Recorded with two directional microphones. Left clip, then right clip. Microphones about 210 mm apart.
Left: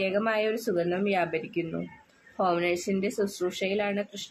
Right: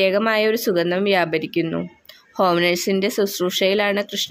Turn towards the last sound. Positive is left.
turn(degrees=-50)  # may be behind; listen again after turning